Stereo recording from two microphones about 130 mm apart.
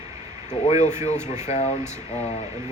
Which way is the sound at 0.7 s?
65° left (ahead or behind).